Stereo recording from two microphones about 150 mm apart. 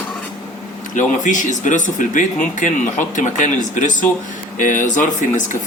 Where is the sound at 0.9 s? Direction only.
55° left (ahead or behind).